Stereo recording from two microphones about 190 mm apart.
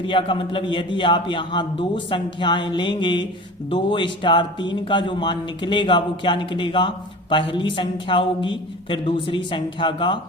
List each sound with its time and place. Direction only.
0.0 s speech: 25° left (ahead or behind)